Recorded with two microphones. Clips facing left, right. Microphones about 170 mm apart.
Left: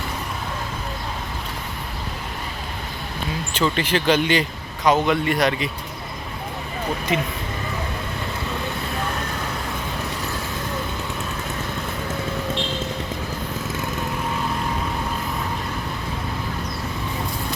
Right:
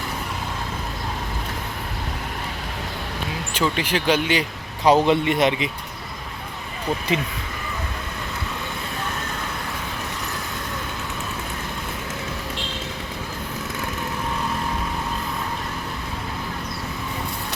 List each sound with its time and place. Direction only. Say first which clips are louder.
3.5 s speech: left 1 dB; 10° right (ahead or behind)
4.8 s a man's voice: right 2 dB; 30° right (ahead or behind)